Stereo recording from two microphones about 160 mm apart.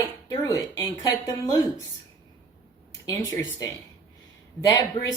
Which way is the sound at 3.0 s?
20° left (ahead or behind).